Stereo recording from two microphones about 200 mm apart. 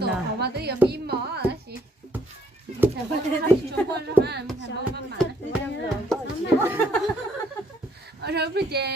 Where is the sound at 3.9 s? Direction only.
55° right (ahead or behind).